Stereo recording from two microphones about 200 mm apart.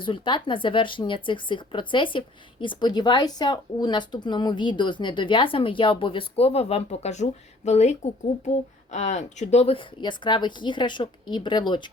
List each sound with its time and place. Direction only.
0.0 s speech: 25° left (ahead or behind)